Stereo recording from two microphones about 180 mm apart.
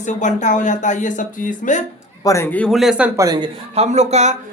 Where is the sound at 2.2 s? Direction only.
15° left (ahead or behind); by 3.5 s 20° right (ahead or behind).